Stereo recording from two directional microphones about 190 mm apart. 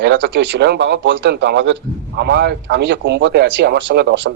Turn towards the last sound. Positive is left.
turn(degrees=-65)  # may be behind; listen again after turning